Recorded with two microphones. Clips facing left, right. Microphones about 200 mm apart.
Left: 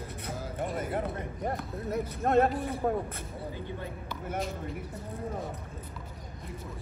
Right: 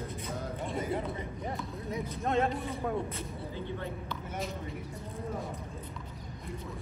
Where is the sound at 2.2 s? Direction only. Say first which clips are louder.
Left 5 dB; 55° left (ahead or behind).